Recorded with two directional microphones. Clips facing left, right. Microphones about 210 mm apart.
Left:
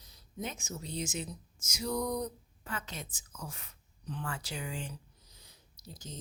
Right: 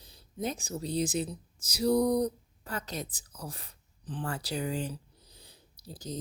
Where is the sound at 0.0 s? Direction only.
30° right (ahead or behind).